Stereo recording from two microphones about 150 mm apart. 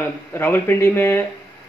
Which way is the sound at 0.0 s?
15° left (ahead or behind).